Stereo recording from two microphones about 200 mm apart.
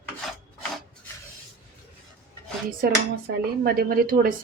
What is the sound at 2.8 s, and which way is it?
A woman's voice, 50° right (ahead or behind).